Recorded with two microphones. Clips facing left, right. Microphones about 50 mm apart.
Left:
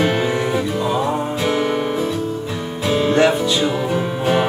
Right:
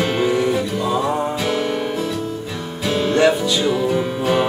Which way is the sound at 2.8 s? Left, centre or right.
Centre.